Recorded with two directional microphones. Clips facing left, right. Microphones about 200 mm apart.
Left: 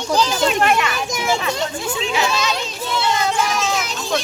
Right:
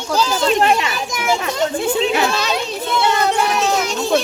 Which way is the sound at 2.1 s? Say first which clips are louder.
Right 2 dB; 60° right (ahead or behind).